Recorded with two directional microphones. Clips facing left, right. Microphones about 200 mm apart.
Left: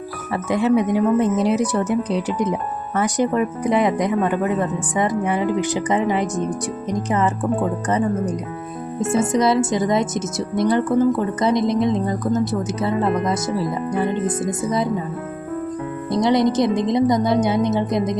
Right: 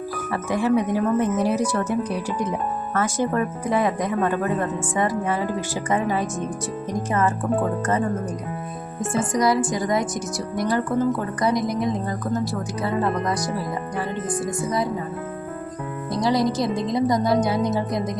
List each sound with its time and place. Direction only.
0.4 s speech: 20° left (ahead or behind)
16.1 s speech: 20° left (ahead or behind)